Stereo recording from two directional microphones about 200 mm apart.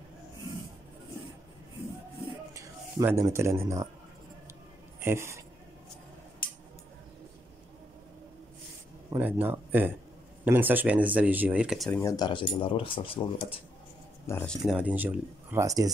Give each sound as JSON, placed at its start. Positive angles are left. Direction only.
{"t": 2.5, "sound": "speech", "side_deg": -15}
{"t": 5.0, "sound": "speech", "side_deg": -15}
{"t": 6.4, "sound": "a sound", "side_deg": 45}
{"t": 9.1, "sound": "speech", "side_deg": -10}
{"t": 12.0, "sound": "speech", "side_deg": 15}
{"t": 14.2, "sound": "speech", "side_deg": 10}
{"t": 14.7, "sound": "speech", "side_deg": -5}